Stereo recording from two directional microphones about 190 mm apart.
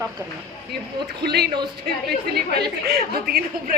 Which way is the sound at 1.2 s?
60° right (ahead or behind).